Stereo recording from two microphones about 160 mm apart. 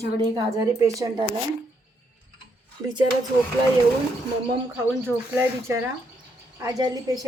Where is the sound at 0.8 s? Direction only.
20° right (ahead or behind).